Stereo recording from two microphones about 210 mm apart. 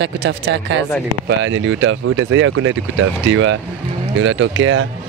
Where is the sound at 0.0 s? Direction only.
60° right (ahead or behind).